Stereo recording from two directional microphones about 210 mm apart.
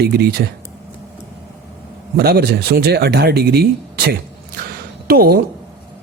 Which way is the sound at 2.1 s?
50° right (ahead or behind).